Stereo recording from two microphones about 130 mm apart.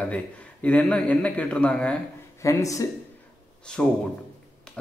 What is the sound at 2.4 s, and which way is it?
Speech, 25° left (ahead or behind).